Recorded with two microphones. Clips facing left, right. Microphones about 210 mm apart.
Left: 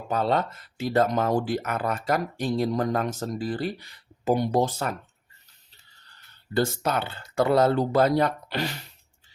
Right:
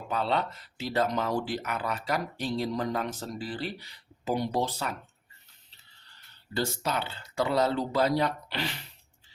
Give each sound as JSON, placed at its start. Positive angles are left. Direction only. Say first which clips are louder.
{"t": 0.1, "sound": "speech", "louder": "left 4 dB", "side_deg": 45}
{"t": 6.5, "sound": "speech", "louder": "left 6 dB", "side_deg": 50}